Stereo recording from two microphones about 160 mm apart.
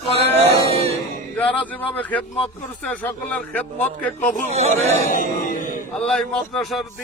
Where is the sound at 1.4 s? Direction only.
10° left (ahead or behind).